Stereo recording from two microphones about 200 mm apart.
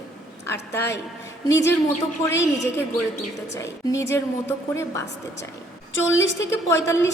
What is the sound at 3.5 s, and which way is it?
A woman's voice, 15° left (ahead or behind).